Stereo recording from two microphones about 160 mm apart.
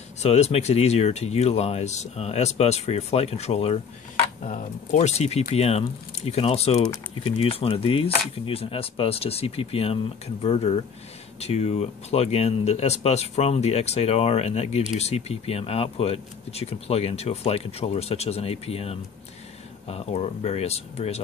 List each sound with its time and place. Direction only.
0.2 s speech: 40° left (ahead or behind)